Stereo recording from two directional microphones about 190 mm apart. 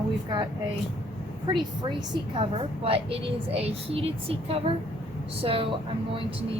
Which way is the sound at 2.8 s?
30° right (ahead or behind).